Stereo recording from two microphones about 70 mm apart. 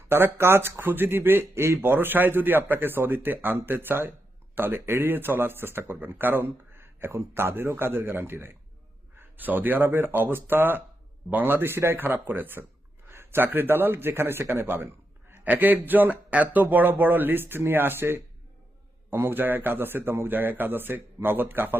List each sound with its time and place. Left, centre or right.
0.1 s speech: right